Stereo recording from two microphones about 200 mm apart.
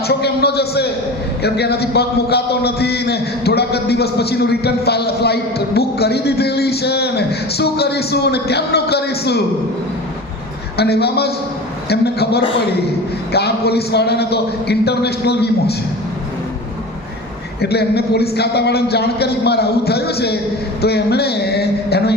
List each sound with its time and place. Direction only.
0.1 s a man's voice: 55° left (ahead or behind)
10.8 s a man's voice: 55° left (ahead or behind)
17.6 s a man's voice: 55° left (ahead or behind)